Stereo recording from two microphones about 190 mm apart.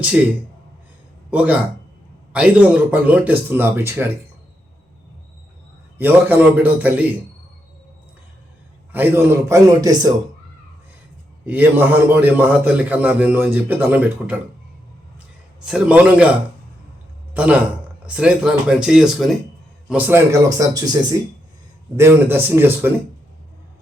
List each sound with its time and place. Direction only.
0.0 s a man's voice: 10° right (ahead or behind)
1.3 s a man's voice: 5° right (ahead or behind)
6.0 s a man's voice: 10° right (ahead or behind)
8.9 s a man's voice: 10° right (ahead or behind)
11.4 s a man's voice: 10° right (ahead or behind)
15.6 s a man's voice: 5° right (ahead or behind)